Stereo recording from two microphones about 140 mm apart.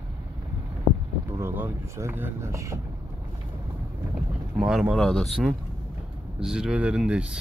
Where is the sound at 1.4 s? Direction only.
15° right (ahead or behind).